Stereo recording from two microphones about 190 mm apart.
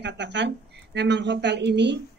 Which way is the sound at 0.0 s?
65° right (ahead or behind).